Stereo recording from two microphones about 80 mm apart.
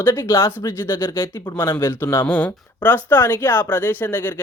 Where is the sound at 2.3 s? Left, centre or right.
Centre.